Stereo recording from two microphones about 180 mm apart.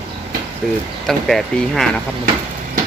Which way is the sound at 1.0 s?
Centre (ahead or behind).